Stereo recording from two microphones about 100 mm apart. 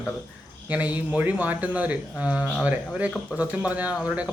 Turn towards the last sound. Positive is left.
turn(degrees=-10)  # may be behind; listen again after turning